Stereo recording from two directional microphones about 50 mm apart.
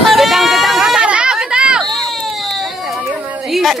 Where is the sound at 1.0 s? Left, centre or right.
Right.